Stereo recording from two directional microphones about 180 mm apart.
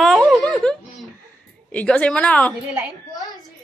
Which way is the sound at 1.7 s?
5° left (ahead or behind).